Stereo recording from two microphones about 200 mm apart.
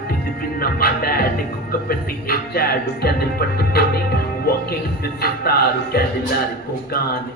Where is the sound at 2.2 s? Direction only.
50° left (ahead or behind).